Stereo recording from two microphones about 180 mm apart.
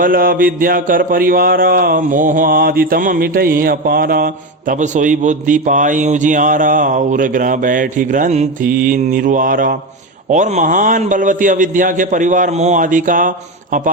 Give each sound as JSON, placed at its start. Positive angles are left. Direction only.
{"t": 0.0, "sound": "a man's voice", "side_deg": -50}